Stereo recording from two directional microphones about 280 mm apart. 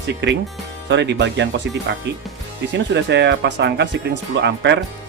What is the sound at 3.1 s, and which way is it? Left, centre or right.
Speech, right.